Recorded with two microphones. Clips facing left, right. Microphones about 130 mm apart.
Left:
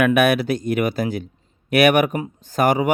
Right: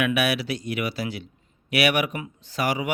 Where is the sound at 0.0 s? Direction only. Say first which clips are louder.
Left 7 dB; 50° left (ahead or behind).